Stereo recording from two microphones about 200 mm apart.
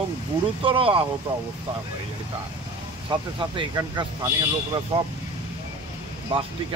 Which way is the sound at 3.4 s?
25° right (ahead or behind).